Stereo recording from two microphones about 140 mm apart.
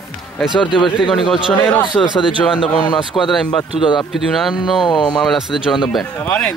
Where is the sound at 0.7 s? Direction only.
35° left (ahead or behind).